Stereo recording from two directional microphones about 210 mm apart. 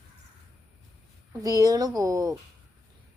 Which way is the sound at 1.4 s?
15° right (ahead or behind).